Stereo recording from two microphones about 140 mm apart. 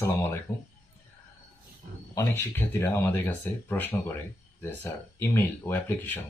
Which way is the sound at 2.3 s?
15° left (ahead or behind).